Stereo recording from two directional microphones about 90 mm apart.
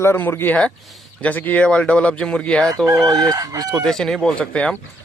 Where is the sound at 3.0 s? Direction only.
45° right (ahead or behind).